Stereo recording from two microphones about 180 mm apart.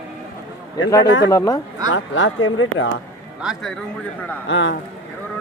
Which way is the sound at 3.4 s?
5° right (ahead or behind).